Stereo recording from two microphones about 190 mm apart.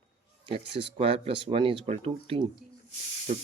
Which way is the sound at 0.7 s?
30° right (ahead or behind).